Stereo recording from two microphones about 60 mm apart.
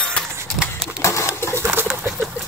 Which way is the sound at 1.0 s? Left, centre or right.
Left.